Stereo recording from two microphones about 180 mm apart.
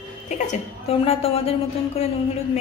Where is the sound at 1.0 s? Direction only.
30° left (ahead or behind).